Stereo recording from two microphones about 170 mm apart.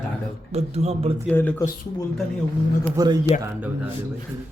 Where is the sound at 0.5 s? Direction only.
40° right (ahead or behind).